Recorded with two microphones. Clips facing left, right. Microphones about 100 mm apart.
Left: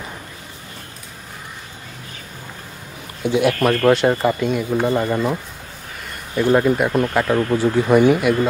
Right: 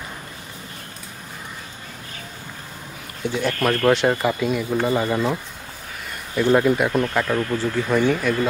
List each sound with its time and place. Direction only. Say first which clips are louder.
3.3 s speech: left 6 dB; 15° left (ahead or behind)
3.5 s speech: left 3 dB; centre (ahead or behind)
6.3 s speech: left 1 dB; 5° left (ahead or behind)
7.3 s speech: left 5 dB; 20° left (ahead or behind)